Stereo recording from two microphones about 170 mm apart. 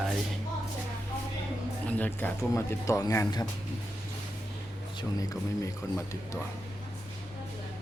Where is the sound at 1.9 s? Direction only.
10° left (ahead or behind).